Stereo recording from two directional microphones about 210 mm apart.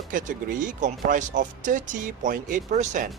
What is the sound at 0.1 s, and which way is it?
Speech, 40° right (ahead or behind).